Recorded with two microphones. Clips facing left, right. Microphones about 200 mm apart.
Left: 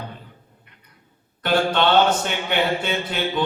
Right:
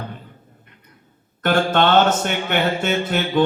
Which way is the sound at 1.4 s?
50° right (ahead or behind).